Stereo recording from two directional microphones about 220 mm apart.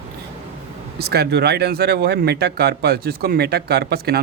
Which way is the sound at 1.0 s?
45° right (ahead or behind).